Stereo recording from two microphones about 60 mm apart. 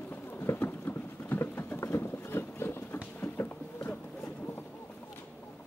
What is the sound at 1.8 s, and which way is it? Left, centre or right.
Boat, left.